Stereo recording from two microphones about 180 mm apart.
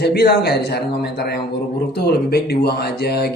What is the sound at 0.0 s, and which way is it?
A man's voice, 60° left (ahead or behind).